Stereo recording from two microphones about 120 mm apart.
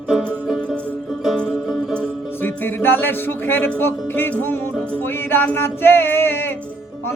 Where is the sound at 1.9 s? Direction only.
15° left (ahead or behind).